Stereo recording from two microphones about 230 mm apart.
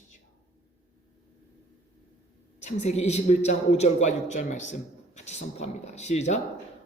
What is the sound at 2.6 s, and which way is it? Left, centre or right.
A woman's voice, left.